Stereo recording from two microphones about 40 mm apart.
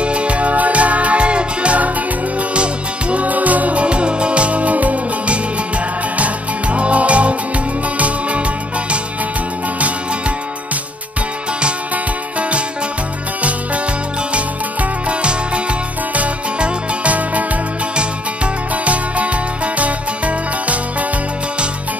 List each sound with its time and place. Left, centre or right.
0.0 s music: right
3.3 s music: right
12.4 s music: right
14.3 s music: right
17.1 s music: right